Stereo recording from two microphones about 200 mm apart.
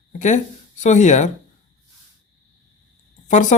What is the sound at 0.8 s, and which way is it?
Speech, 35° left (ahead or behind).